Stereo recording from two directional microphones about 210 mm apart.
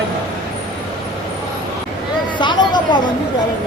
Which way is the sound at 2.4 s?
20° left (ahead or behind).